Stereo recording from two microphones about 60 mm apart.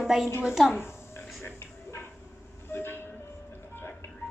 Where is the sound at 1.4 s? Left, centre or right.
Left.